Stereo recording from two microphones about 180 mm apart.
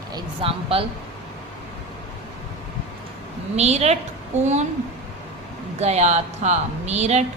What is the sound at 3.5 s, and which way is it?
A woman's voice, 35° right (ahead or behind).